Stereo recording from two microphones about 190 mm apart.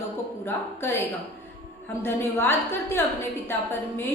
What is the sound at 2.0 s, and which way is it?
A woman's voice, 10° left (ahead or behind).